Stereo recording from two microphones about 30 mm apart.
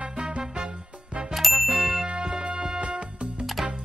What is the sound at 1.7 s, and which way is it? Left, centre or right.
Ding, right.